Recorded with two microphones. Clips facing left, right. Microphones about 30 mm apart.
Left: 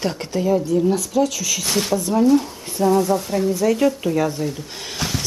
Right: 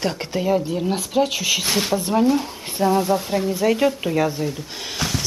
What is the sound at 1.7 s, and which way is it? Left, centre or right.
Speech, centre.